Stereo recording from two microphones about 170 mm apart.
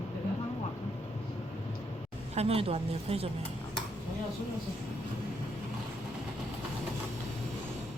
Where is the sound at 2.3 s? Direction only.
35° right (ahead or behind).